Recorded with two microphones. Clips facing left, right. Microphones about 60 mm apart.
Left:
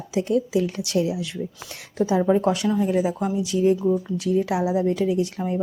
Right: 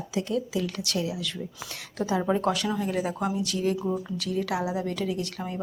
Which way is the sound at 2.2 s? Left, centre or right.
Centre.